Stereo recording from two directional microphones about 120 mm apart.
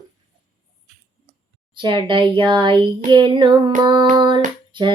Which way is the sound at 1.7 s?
45° right (ahead or behind).